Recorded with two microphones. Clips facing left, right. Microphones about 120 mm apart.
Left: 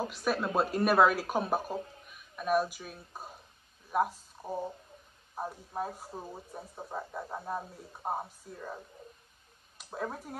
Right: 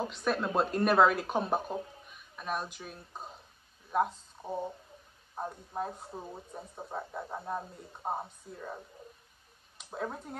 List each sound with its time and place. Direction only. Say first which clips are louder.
0.0 s speech: even; 5° left (ahead or behind)